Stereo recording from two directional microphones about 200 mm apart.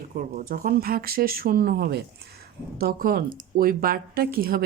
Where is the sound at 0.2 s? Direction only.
45° right (ahead or behind).